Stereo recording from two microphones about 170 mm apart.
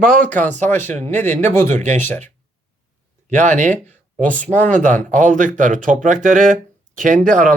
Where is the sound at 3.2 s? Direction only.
45° right (ahead or behind).